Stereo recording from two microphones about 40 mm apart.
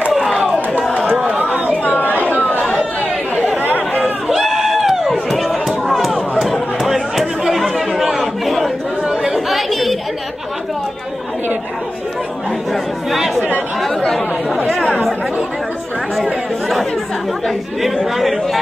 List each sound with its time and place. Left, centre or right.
0.1 s chatter: centre
1.3 s chatter: left
4.3 s a sound: centre
6.4 s chatter: centre
9.0 s chatter: centre
9.3 s chatter: centre
13.1 s chatter: centre
18.1 s speech: centre